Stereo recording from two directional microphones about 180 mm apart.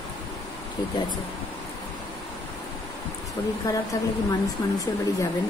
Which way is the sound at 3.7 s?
20° left (ahead or behind).